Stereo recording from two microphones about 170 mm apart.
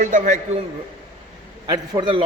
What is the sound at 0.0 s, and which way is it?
Speech, 50° right (ahead or behind).